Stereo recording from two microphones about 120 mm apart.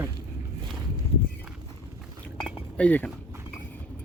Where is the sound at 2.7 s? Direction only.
10° left (ahead or behind).